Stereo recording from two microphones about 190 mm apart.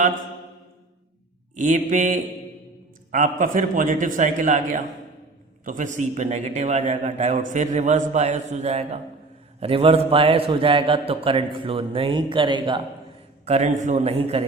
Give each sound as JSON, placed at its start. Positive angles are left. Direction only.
{"t": 1.5, "sound": "a man's voice", "side_deg": -40}
{"t": 13.4, "sound": "a man's voice", "side_deg": -35}